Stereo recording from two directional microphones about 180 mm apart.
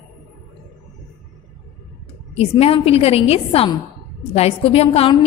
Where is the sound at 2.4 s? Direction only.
35° left (ahead or behind).